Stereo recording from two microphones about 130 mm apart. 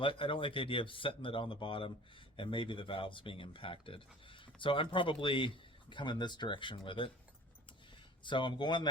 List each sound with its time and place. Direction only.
0.0 s speech: 40° left (ahead or behind)
8.2 s speech: 40° left (ahead or behind)